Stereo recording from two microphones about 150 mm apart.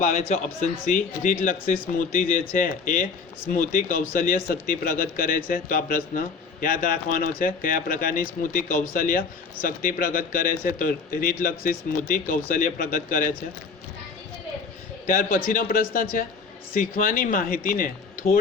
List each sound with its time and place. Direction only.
0.0 s a man's voice: 50° left (ahead or behind)
0.9 s speech: 65° left (ahead or behind)
15.0 s speech: 65° left (ahead or behind)